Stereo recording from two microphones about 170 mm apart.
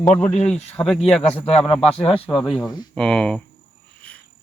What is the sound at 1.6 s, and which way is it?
Speech, 35° left (ahead or behind).